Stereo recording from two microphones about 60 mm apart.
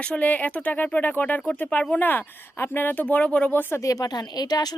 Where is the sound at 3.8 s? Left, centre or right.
Left.